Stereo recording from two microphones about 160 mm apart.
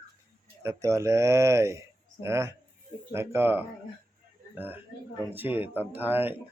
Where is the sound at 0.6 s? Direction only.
20° right (ahead or behind).